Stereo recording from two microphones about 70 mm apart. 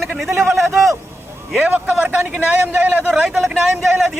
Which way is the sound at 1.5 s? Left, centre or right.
Centre.